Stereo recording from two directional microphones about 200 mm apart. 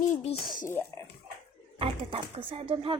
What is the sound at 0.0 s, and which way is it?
Speech, 40° left (ahead or behind).